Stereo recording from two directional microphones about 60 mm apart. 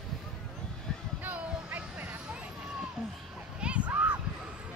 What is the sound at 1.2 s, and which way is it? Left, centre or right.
Vehicle, right.